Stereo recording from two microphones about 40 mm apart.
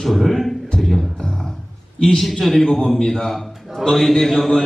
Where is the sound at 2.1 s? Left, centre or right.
Centre.